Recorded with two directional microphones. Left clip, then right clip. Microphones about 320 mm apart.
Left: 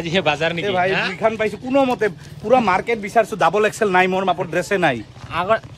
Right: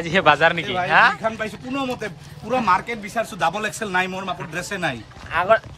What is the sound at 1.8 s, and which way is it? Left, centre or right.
Speech, left.